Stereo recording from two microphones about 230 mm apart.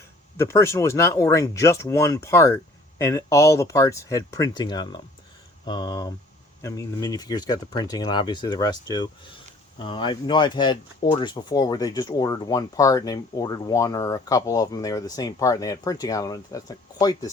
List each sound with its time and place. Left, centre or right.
0.3 s speech: centre